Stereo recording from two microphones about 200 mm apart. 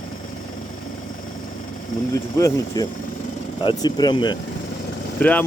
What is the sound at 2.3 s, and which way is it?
Speech, 15° left (ahead or behind).